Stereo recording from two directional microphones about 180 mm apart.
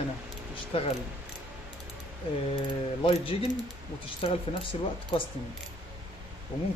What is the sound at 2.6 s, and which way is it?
Speech, 30° left (ahead or behind).